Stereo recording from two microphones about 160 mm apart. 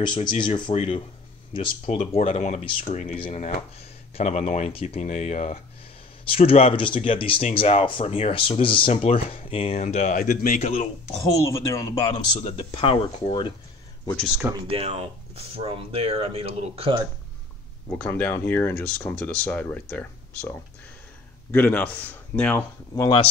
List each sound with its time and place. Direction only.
0.0 s speech: 30° left (ahead or behind)
2.0 s speech: 45° left (ahead or behind)
10.6 s speech: 40° left (ahead or behind)
11.2 s speech: 20° left (ahead or behind)
14.1 s speech: centre (ahead or behind)
14.5 s speech: 35° right (ahead or behind)
17.8 s speech: 10° left (ahead or behind)
22.9 s speech: 25° left (ahead or behind)